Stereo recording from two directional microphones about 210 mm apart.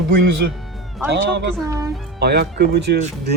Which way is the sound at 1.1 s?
55° right (ahead or behind).